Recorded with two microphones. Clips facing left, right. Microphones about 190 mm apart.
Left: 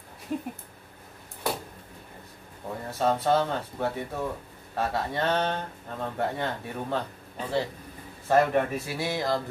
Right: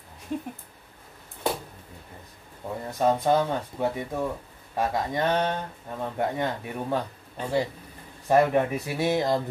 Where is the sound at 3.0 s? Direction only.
15° right (ahead or behind).